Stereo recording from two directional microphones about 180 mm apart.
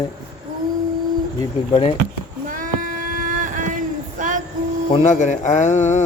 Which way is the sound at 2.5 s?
50° right (ahead or behind).